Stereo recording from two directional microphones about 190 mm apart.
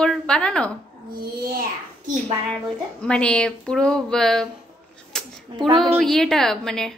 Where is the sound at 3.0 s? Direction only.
5° left (ahead or behind).